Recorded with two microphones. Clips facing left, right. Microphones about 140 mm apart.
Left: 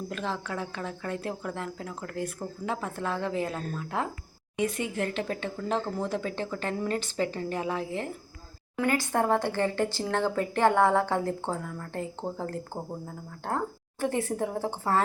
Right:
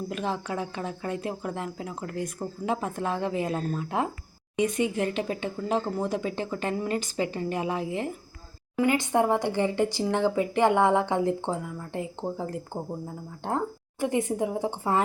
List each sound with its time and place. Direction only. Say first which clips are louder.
0.1 s speech: right 2 dB; 15° right (ahead or behind)